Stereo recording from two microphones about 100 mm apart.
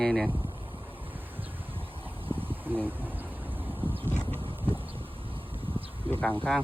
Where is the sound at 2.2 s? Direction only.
20° right (ahead or behind).